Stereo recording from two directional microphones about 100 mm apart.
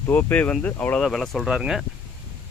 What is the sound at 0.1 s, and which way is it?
Speech, 20° left (ahead or behind).